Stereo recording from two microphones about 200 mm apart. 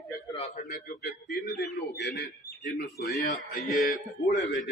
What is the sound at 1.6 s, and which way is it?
A man's voice, 60° left (ahead or behind).